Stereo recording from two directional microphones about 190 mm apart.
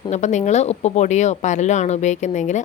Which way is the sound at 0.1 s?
40° left (ahead or behind).